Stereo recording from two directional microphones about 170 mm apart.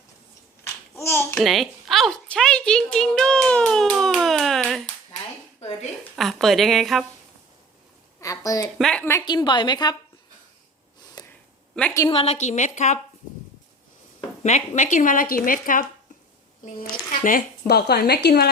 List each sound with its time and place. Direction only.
0.9 s babbling: 15° left (ahead or behind)
1.4 s a woman's voice: centre (ahead or behind)
6.1 s a woman's voice: centre (ahead or behind)
8.2 s a sound: 20° left (ahead or behind)
8.8 s a woman's voice: 5° left (ahead or behind)
9.2 s a woman's voice: 25° left (ahead or behind)
11.2 s a sound: 25° left (ahead or behind)
11.7 s a woman's voice: 5° left (ahead or behind)
12.1 s speech: 35° left (ahead or behind)
14.2 s speech: 40° left (ahead or behind)
17.1 s speech: 55° left (ahead or behind); by 18.4 s 75° left (ahead or behind)